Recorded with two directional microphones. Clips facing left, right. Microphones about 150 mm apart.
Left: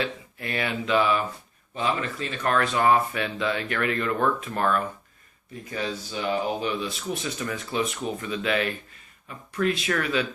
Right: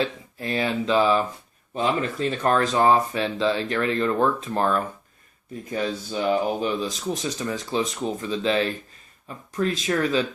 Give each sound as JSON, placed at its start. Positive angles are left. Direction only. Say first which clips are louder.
{"t": 0.0, "sound": "speech", "louder": "right 3 dB", "side_deg": -35}